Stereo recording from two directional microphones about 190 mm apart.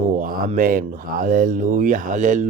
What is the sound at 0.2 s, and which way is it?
Speech, 45° right (ahead or behind).